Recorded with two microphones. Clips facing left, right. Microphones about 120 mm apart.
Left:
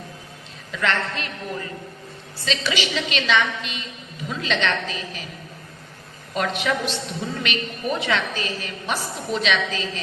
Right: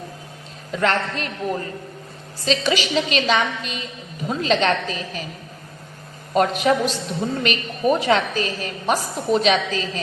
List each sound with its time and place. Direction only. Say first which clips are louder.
0.7 s a woman's voice: right 3 dB; 40° right (ahead or behind)
6.3 s a woman's voice: right 6 dB; 40° right (ahead or behind)